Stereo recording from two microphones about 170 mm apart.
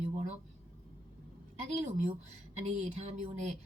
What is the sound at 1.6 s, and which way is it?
Speech, 40° right (ahead or behind).